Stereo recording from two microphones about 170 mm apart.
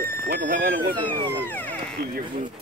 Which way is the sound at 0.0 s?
60° right (ahead or behind).